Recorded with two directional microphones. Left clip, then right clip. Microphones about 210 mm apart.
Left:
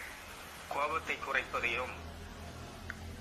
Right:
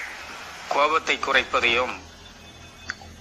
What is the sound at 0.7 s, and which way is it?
A man's voice, 45° right (ahead or behind).